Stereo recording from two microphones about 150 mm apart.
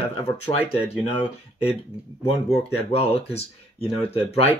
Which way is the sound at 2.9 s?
45° left (ahead or behind).